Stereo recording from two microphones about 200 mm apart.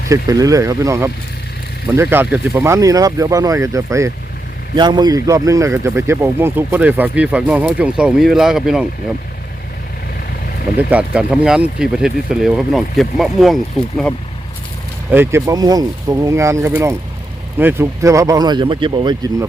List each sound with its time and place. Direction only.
0.1 s speech: 15° right (ahead or behind)
10.8 s speech: 5° right (ahead or behind)
15.1 s speech: 10° right (ahead or behind)